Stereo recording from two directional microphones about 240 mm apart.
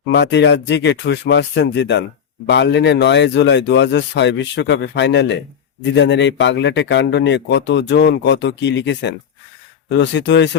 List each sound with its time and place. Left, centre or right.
0.1 s speech: left